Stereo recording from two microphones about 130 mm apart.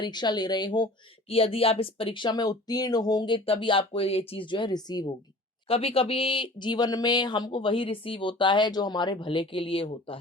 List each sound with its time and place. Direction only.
0.0 s speech: 35° left (ahead or behind)
1.3 s speech: 45° left (ahead or behind)
5.6 s speech: 45° left (ahead or behind)